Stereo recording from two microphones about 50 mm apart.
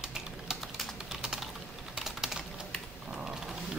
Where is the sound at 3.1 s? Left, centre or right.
Centre.